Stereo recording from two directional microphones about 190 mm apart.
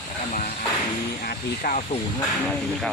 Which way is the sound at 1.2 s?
50° left (ahead or behind).